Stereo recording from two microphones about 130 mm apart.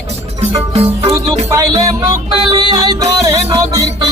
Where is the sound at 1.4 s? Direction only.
30° right (ahead or behind).